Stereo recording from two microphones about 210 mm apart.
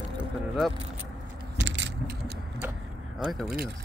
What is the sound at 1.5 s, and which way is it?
Keys jangling, 55° right (ahead or behind).